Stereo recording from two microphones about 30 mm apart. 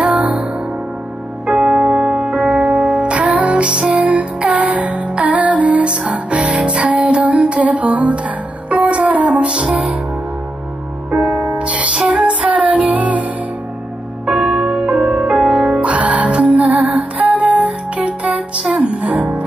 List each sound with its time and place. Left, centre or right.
0.0 s music: right
1.5 s music: right
2.2 s music: right
5.9 s music: right
9.1 s music: right
9.5 s music: right
11.1 s music: right
14.2 s music: right
15.5 s music: right